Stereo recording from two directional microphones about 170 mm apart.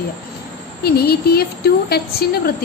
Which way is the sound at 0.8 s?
65° left (ahead or behind).